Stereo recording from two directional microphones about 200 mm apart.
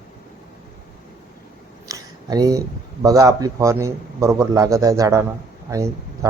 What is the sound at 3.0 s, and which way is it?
Speech, 15° right (ahead or behind).